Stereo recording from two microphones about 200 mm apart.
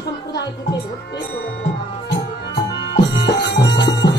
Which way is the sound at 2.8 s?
60° left (ahead or behind).